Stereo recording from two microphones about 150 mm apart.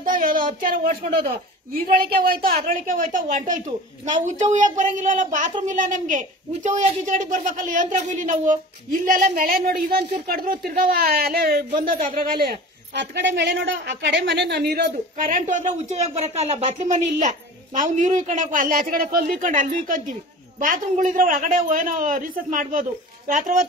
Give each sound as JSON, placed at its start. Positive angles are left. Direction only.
{"t": 0.0, "sound": "speech", "side_deg": -65}
{"t": 1.8, "sound": "speech", "side_deg": -85}
{"t": 9.0, "sound": "speech", "side_deg": -75}
{"t": 10.2, "sound": "speech", "side_deg": -70}
{"t": 11.9, "sound": "speech", "side_deg": -65}